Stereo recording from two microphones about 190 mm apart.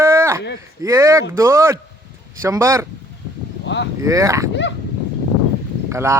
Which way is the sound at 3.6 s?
65° left (ahead or behind).